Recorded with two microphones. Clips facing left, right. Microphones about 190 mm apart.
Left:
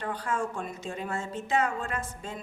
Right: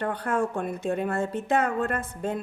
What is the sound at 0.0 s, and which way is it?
Speech, 60° right (ahead or behind).